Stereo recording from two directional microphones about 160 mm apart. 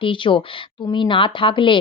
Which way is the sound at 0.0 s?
30° left (ahead or behind).